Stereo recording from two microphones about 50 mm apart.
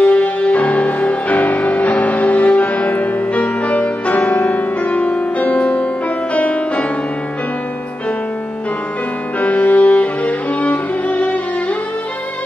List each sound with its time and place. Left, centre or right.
0.0 s music: left
9.4 s music: left